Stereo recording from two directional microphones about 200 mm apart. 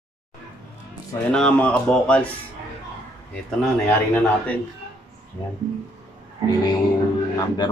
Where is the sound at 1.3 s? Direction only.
5° left (ahead or behind).